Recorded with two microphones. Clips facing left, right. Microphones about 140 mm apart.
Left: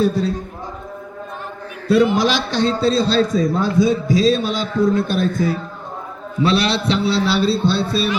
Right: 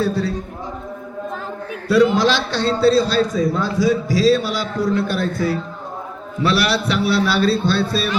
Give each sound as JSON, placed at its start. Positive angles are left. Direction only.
{"t": 0.0, "sound": "a man's voice", "side_deg": 20}
{"t": 1.9, "sound": "a man's voice", "side_deg": 20}
{"t": 6.4, "sound": "a man's voice", "side_deg": 25}